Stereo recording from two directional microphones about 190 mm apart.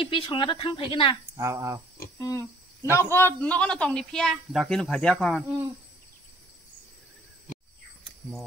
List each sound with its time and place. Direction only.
0.0 s speech: 25° left (ahead or behind)
1.3 s speech: 15° right (ahead or behind)
2.1 s humming: 15° left (ahead or behind)
3.0 s a man's voice: 10° left (ahead or behind)